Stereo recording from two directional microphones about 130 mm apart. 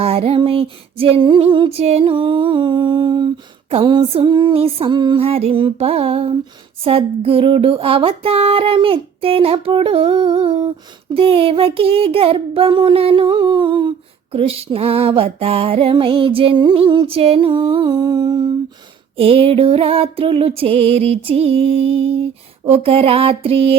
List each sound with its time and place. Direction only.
0.0 s female singing: 50° right (ahead or behind)
3.7 s music: 40° right (ahead or behind)
19.2 s music: 45° right (ahead or behind)